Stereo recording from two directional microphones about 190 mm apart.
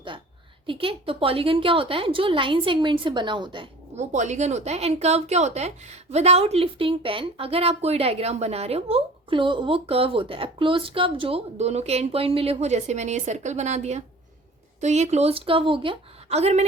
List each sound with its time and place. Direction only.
0.7 s a woman's voice: 30° right (ahead or behind)
3.9 s speech: 40° right (ahead or behind)